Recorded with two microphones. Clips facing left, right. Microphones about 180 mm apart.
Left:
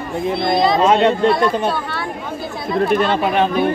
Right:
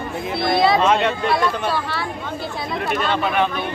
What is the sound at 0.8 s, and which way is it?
Speech, 30° left (ahead or behind).